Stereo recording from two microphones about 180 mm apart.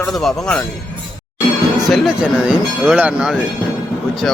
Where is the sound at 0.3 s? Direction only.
5° left (ahead or behind).